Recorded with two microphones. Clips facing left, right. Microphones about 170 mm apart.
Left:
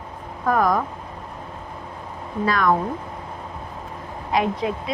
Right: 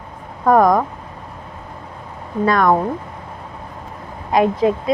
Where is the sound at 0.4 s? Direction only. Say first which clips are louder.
Right 7 dB; 45° right (ahead or behind).